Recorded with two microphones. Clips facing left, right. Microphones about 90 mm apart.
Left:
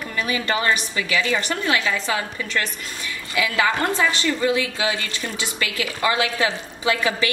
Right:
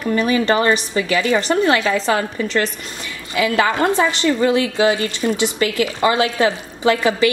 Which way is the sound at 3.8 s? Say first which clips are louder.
Right 5 dB; 20° right (ahead or behind).